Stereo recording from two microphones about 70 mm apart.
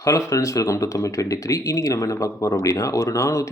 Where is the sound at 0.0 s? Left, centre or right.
Left.